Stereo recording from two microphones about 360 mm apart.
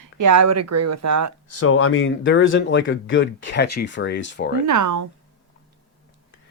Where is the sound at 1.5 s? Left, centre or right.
Left.